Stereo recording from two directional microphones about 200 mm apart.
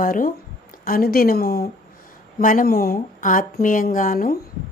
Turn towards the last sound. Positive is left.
turn(degrees=45)  # may be behind; listen again after turning